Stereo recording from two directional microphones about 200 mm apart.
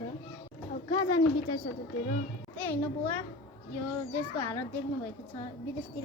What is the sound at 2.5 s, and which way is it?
Music, 10° left (ahead or behind).